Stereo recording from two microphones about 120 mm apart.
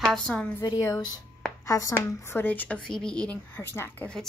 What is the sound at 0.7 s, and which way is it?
A woman's voice, 30° left (ahead or behind).